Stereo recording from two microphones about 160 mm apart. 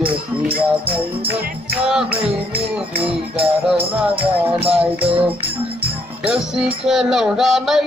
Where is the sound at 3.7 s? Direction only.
35° right (ahead or behind).